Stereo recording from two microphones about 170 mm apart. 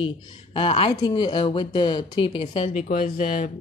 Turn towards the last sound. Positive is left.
turn(degrees=50)  # may be behind; listen again after turning